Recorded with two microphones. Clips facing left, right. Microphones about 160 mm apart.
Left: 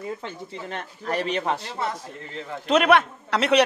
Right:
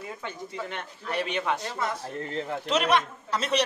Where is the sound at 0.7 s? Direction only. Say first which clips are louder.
Left 5 dB; 40° left (ahead or behind).